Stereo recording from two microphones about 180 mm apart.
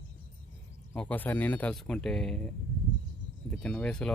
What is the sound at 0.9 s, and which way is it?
Speech, 10° left (ahead or behind).